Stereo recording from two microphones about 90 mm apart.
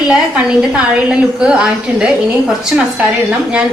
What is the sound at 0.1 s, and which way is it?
A woman's voice, 10° right (ahead or behind).